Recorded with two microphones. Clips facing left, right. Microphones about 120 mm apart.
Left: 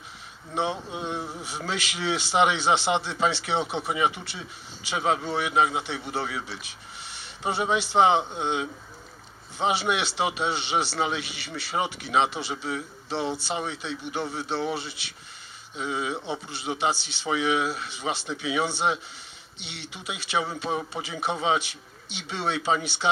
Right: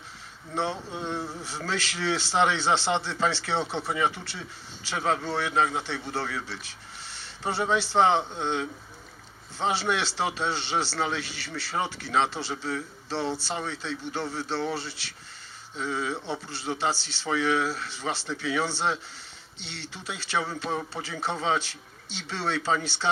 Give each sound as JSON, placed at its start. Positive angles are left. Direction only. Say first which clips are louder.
{"t": 0.5, "sound": "speech", "louder": "left 2 dB", "side_deg": 15}